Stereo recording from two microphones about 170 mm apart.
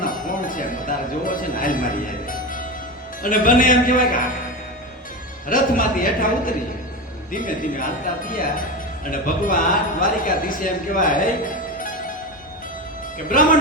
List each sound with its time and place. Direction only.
0.0 s music: 50° left (ahead or behind)
3.2 s speech: 55° left (ahead or behind)
5.5 s speech: 55° left (ahead or behind)
13.1 s a man's voice: 55° left (ahead or behind)